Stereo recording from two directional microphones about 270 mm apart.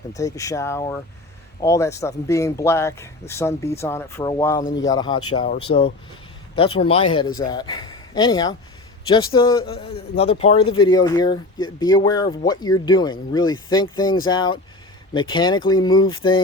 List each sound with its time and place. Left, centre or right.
0.1 s speech: centre